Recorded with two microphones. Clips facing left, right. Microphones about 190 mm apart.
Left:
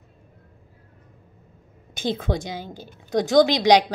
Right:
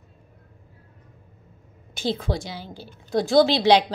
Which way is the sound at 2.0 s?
20° left (ahead or behind).